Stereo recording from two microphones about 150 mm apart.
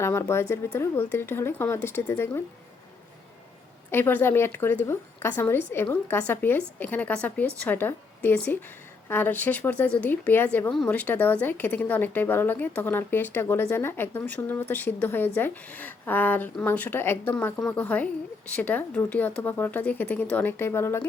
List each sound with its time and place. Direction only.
0.0 s speech: 15° left (ahead or behind)
3.9 s speech: 15° left (ahead or behind)